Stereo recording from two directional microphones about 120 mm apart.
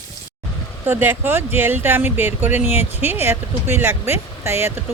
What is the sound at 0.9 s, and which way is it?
Speech, 15° right (ahead or behind).